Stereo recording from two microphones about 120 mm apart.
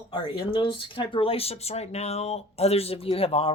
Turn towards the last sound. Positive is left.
turn(degrees=55)  # may be behind; listen again after turning